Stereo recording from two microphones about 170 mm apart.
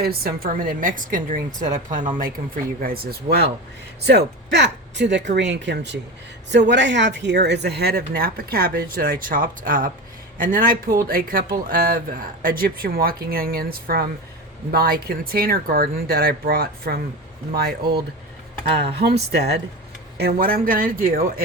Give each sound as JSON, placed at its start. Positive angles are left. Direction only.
{"t": 0.0, "sound": "a woman's voice", "side_deg": -65}
{"t": 2.8, "sound": "speech", "side_deg": -60}
{"t": 4.4, "sound": "speech", "side_deg": -90}
{"t": 19.3, "sound": "speech", "side_deg": -75}
{"t": 20.1, "sound": "speech", "side_deg": -65}